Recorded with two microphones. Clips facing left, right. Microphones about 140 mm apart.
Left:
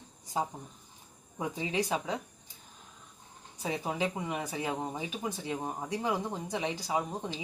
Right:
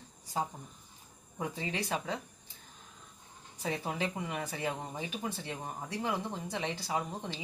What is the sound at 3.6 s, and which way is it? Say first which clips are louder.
Speech: left 2 dB; 15° left (ahead or behind).